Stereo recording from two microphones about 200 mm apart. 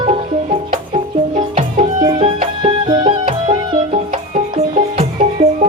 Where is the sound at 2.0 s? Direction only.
25° right (ahead or behind).